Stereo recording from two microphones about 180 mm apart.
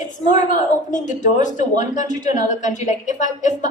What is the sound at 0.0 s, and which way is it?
A woman's voice, 45° left (ahead or behind).